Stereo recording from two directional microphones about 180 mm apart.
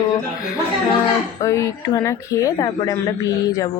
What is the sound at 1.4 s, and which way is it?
Speech, 15° left (ahead or behind).